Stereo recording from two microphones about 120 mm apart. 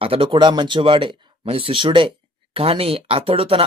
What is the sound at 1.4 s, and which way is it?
Speech, 50° right (ahead or behind).